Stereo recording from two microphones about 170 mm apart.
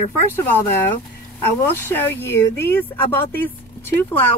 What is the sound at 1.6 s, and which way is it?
Speech, 10° left (ahead or behind).